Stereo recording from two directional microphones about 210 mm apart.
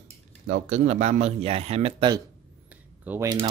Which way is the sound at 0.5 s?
35° right (ahead or behind).